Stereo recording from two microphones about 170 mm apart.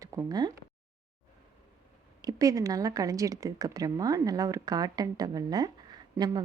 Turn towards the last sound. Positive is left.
turn(degrees=-25)  # may be behind; listen again after turning